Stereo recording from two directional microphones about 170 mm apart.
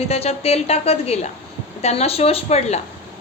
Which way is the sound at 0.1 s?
35° left (ahead or behind).